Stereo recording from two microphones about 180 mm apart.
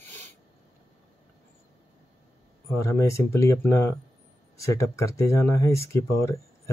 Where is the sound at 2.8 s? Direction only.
15° left (ahead or behind).